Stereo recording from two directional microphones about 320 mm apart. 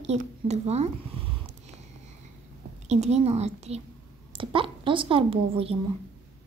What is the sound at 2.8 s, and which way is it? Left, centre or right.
A woman's voice, right.